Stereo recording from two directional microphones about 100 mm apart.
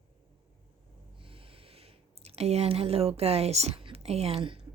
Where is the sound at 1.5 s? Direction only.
80° right.